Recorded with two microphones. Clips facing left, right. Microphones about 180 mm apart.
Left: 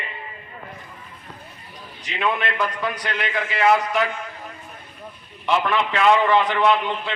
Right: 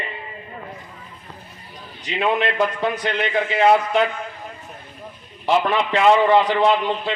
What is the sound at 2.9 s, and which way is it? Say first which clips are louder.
Speech: right 5 dB; 25° right (ahead or behind).